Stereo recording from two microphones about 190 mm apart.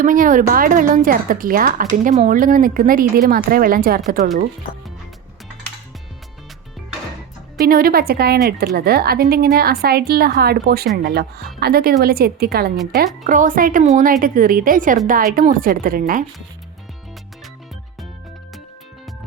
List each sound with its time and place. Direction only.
0.0 s speech: 45° right (ahead or behind)
7.6 s speech: 50° right (ahead or behind)